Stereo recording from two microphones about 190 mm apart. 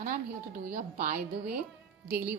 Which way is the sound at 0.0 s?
45° right (ahead or behind).